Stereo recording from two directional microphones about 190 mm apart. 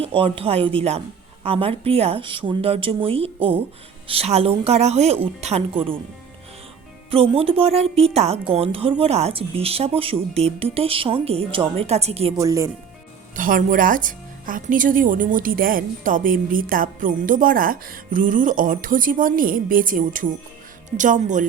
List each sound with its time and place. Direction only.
0.0 s a woman's voice: 30° right (ahead or behind)
7.1 s a woman's voice: 30° right (ahead or behind)
12.4 s speech: 15° right (ahead or behind)
13.3 s a woman's voice: 45° right (ahead or behind)